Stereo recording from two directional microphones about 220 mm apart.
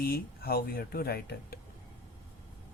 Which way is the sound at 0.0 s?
45° left (ahead or behind).